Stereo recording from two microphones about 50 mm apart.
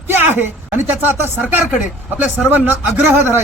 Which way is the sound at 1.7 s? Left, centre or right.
Right.